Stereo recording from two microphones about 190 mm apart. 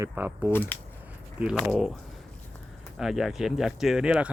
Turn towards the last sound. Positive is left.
turn(degrees=-5)  # may be behind; listen again after turning